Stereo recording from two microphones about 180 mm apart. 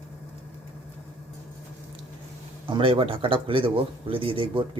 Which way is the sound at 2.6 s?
30° right (ahead or behind).